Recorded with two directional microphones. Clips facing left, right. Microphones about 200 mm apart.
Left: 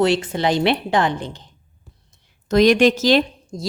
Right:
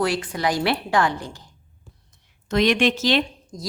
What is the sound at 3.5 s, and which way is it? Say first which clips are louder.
Speech: left 6 dB; 30° left (ahead or behind).